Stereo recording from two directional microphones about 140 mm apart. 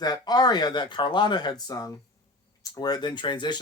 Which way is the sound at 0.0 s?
30° left (ahead or behind).